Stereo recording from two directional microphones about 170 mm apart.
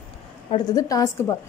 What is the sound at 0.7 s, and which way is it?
Speech, 20° left (ahead or behind).